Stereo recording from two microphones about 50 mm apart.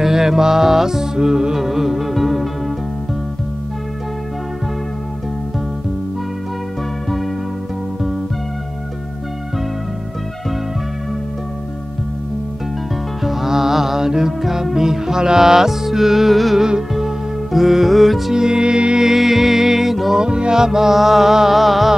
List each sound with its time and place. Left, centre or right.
0.0 s music: centre
13.2 s music: centre
18.3 s music: centre
19.0 s music: centre
20.2 s music: centre